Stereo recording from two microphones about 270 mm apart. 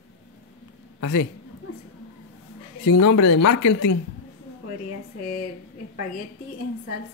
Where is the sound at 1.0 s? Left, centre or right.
Left.